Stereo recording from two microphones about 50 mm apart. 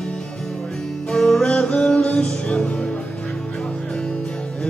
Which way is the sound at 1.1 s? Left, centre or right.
Centre.